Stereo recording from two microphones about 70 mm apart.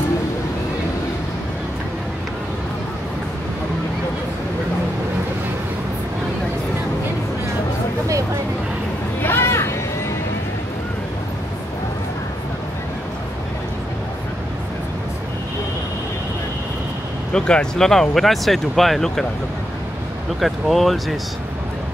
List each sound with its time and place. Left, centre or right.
9.2 s children playing: left
17.3 s speech: centre
20.3 s speech: centre